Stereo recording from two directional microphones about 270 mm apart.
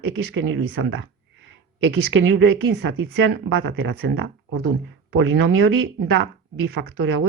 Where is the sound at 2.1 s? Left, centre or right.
Right.